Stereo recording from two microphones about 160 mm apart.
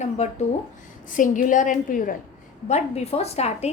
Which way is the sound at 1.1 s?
55° left (ahead or behind).